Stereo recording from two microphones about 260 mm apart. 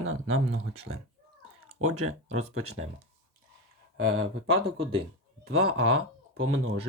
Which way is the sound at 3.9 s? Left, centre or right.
Right.